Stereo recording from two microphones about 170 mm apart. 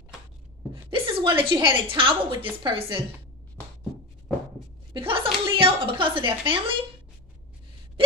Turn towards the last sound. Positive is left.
turn(degrees=-30)  # may be behind; listen again after turning